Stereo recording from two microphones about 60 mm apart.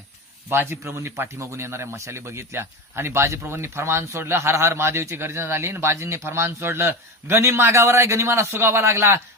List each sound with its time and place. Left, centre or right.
0.5 s a man's voice: right